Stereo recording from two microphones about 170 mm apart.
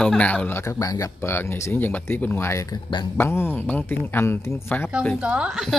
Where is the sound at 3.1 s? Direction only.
15° left (ahead or behind).